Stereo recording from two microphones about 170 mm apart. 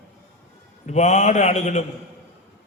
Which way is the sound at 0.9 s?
40° left (ahead or behind).